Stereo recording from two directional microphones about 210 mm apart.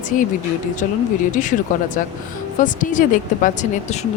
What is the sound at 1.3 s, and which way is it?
Speech, 35° left (ahead or behind).